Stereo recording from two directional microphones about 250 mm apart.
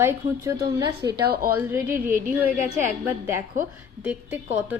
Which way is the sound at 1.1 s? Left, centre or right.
Right.